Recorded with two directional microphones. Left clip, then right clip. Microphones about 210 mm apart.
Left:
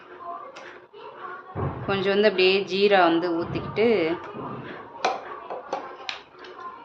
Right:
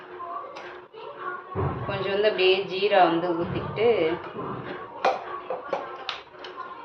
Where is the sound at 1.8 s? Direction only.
50° left (ahead or behind).